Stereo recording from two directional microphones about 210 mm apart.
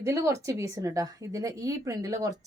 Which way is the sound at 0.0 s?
15° right (ahead or behind).